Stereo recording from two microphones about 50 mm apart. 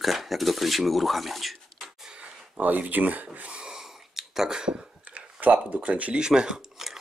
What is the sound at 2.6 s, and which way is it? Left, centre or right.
Speech, right.